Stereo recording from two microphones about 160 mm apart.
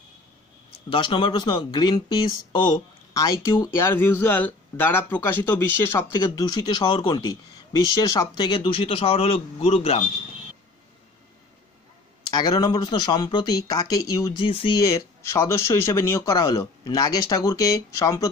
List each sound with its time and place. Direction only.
0.8 s speech: 30° left (ahead or behind)
8.4 s a man's voice: 30° left (ahead or behind)
12.3 s speech: 25° left (ahead or behind)
14.5 s a man's voice: 35° left (ahead or behind)
14.8 s speech: 20° left (ahead or behind)